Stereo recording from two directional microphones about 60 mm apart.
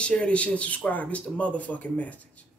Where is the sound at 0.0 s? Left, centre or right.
Centre.